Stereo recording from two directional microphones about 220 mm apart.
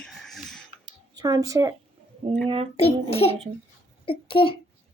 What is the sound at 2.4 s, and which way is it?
Speech, 25° right (ahead or behind).